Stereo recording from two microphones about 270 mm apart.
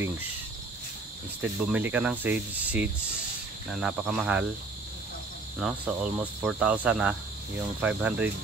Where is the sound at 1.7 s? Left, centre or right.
Centre.